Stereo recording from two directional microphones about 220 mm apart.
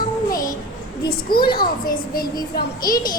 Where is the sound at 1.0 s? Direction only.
45° left (ahead or behind).